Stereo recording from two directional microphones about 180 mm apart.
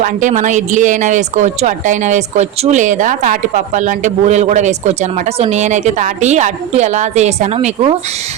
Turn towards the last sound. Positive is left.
turn(degrees=-35)  # may be behind; listen again after turning